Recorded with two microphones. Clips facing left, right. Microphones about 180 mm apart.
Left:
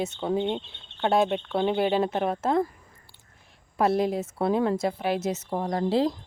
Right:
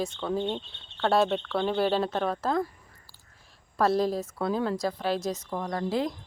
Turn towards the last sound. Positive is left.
turn(degrees=30)  # may be behind; listen again after turning